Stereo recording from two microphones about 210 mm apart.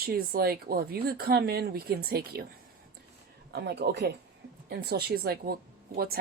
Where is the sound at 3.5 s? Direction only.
50° right (ahead or behind).